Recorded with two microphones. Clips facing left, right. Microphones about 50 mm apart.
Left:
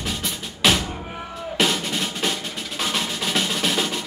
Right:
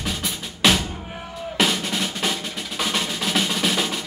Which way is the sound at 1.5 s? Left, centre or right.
Centre.